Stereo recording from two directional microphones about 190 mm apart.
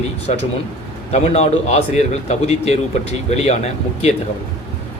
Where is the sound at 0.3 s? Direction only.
35° left (ahead or behind).